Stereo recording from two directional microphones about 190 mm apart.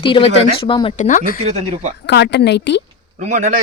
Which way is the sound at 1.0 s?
45° left (ahead or behind).